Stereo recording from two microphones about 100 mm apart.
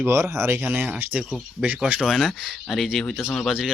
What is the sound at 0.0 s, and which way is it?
Speech, 25° right (ahead or behind).